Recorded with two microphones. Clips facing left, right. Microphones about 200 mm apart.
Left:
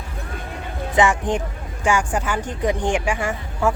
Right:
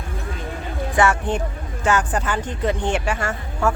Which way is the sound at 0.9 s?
15° left (ahead or behind).